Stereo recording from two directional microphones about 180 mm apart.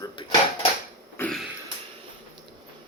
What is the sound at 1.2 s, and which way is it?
Throat clearing, 10° left (ahead or behind).